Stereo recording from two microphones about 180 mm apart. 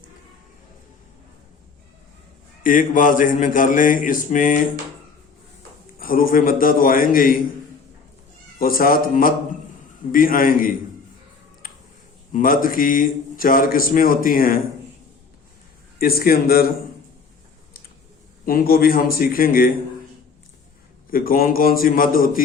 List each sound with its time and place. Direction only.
2.6 s a man's voice: 50° left (ahead or behind)
6.0 s a man's voice: 50° left (ahead or behind)
8.5 s a man's voice: 50° left (ahead or behind)
11.6 s a sound: 50° left (ahead or behind)
12.3 s a man's voice: 50° left (ahead or behind)
16.0 s a man's voice: 55° left (ahead or behind)
18.4 s a man's voice: 55° left (ahead or behind)
21.1 s a man's voice: 55° left (ahead or behind)